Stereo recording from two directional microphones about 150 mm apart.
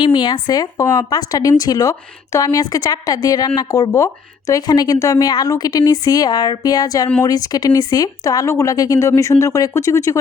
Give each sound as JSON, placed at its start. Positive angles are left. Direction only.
{"t": 0.0, "sound": "speech", "side_deg": 30}